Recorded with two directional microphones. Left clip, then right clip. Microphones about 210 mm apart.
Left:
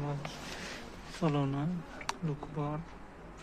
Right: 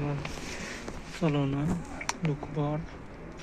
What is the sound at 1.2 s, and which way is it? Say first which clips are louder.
Speech: right 3 dB; 15° left (ahead or behind).